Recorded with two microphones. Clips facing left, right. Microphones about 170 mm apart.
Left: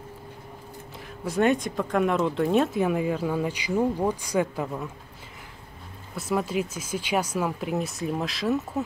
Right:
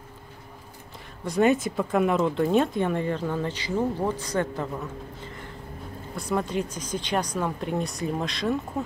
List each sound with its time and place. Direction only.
1.2 s speech: centre (ahead or behind)
6.1 s speech: 5° left (ahead or behind)